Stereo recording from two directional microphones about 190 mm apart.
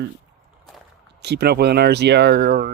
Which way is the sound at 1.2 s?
60° right (ahead or behind).